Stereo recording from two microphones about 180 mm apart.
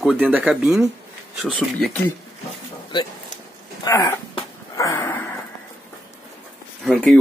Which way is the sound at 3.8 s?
20° left (ahead or behind).